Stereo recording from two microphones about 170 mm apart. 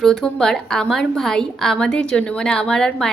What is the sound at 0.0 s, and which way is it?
A woman's voice, 5° left (ahead or behind).